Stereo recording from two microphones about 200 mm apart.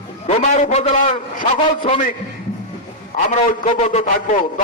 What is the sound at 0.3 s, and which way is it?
A man's voice, 35° left (ahead or behind).